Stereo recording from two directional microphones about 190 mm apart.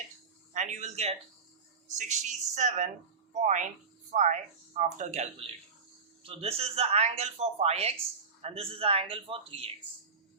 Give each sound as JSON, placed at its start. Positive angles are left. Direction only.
{"t": 0.5, "sound": "speech", "side_deg": -40}